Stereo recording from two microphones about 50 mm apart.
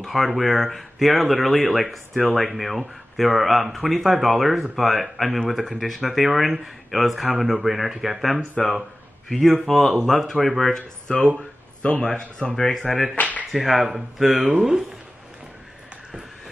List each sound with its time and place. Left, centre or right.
0.0 s speech: centre
11.1 s a man's voice: left; by 13.1 s centre
13.1 s speech: left
13.5 s whip: centre
13.8 s speech: centre
14.3 s speech: right
14.6 s speech: centre